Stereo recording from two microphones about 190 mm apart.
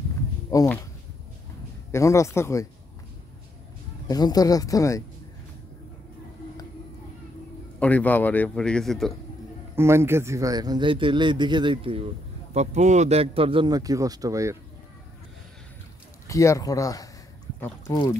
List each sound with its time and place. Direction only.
0.5 s speech: 15° left (ahead or behind)
1.9 s a man's voice: 15° left (ahead or behind)
4.1 s speech: 20° left (ahead or behind)
7.8 s a man's voice: 10° left (ahead or behind)
9.8 s speech: 15° right (ahead or behind)
16.3 s a man's voice: 15° left (ahead or behind)